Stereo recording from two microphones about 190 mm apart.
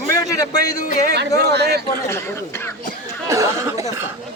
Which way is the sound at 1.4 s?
60° right (ahead or behind).